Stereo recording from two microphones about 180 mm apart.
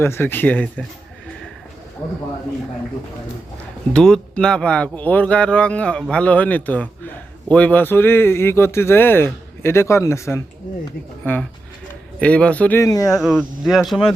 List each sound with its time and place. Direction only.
0.0 s speech: 10° left (ahead or behind)
3.9 s speech: 5° left (ahead or behind)
12.2 s speech: 5° left (ahead or behind)
13.1 s speech: centre (ahead or behind)